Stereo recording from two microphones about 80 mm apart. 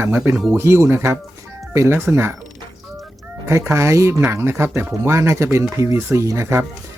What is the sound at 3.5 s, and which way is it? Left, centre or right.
Speech, right.